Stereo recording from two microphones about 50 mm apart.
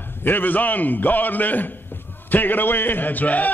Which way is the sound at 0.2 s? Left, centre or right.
Left.